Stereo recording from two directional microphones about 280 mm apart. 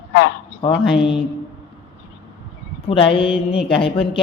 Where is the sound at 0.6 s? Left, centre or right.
Centre.